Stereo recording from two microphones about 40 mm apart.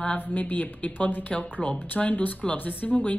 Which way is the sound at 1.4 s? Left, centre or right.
Left.